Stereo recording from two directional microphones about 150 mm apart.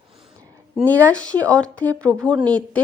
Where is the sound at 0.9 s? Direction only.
10° left (ahead or behind).